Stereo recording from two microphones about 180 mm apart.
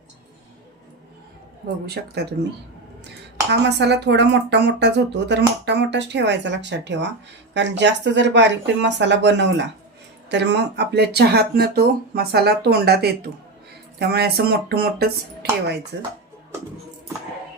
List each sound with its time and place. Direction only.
2.0 s speech: 60° right (ahead or behind)
3.5 s speech: 70° right (ahead or behind)